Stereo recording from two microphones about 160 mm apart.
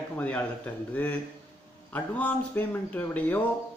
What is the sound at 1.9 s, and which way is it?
Speech, 10° left (ahead or behind).